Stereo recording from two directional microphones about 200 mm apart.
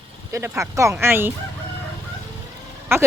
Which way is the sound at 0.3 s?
15° right (ahead or behind).